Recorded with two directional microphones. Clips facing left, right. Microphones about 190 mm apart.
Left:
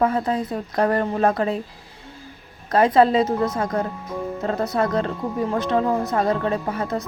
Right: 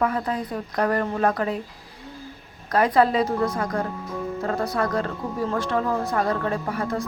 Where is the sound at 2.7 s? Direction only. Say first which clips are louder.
Left 3 dB; 25° left (ahead or behind).